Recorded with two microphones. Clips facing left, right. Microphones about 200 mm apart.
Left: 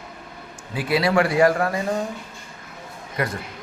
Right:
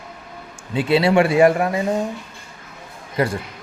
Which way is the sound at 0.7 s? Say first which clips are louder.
Right 4 dB; 25° right (ahead or behind).